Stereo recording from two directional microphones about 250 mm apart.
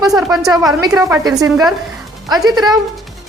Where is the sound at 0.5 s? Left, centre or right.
Centre.